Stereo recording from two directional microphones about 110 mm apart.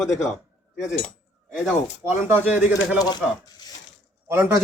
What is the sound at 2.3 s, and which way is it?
Speech, 15° right (ahead or behind).